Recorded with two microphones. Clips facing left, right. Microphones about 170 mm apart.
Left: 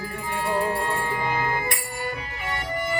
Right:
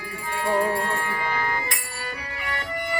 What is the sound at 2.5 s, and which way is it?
Music, 20° left (ahead or behind).